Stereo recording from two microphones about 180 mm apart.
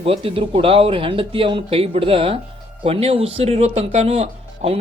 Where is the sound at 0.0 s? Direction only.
30° right (ahead or behind).